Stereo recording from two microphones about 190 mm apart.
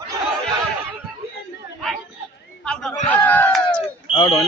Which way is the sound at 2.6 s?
5° left (ahead or behind).